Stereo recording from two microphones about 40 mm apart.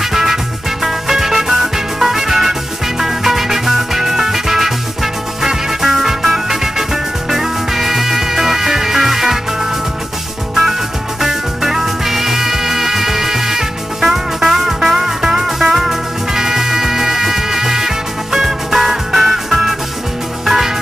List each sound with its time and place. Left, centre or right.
0.0 s music: centre